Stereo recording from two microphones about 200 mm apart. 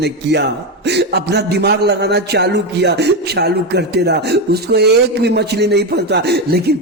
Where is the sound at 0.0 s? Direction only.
60° right (ahead or behind).